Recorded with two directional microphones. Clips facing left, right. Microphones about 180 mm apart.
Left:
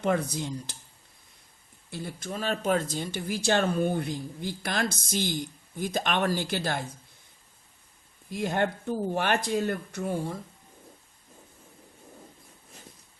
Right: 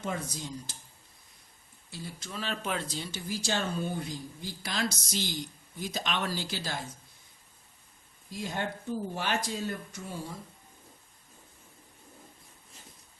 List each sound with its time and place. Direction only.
0.0 s speech: 65° left (ahead or behind)
1.9 s speech: 55° left (ahead or behind)
8.3 s speech: 60° left (ahead or behind)